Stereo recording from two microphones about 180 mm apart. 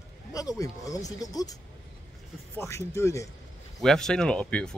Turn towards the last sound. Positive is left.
turn(degrees=5)  # may be behind; listen again after turning